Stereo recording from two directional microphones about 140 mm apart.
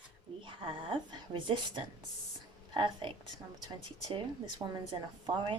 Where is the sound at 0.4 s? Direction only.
35° right (ahead or behind).